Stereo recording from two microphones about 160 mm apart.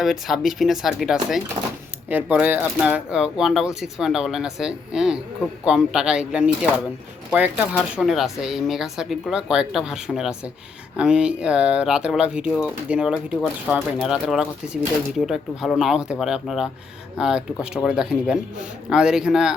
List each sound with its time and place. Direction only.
0.0 s speech: centre (ahead or behind)
1.6 s speech: 35° right (ahead or behind)
2.4 s speech: 10° right (ahead or behind)